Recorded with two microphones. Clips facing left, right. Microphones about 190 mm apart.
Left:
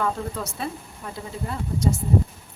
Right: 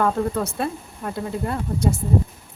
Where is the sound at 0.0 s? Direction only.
55° right (ahead or behind).